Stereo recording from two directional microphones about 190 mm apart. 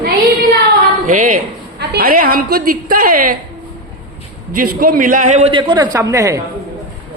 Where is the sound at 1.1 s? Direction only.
45° right (ahead or behind).